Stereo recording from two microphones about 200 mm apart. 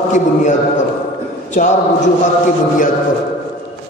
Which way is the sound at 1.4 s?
35° left (ahead or behind).